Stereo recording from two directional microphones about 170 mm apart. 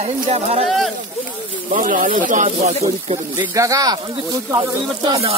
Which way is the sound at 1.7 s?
50° right (ahead or behind).